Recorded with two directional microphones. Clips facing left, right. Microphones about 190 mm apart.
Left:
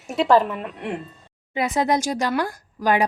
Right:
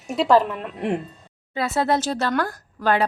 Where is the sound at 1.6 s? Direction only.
15° left (ahead or behind).